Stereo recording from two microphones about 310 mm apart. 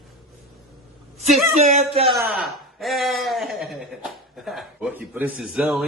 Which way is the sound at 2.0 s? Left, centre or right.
Centre.